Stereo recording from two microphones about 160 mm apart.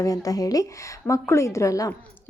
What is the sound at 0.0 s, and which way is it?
A woman's voice, 20° left (ahead or behind).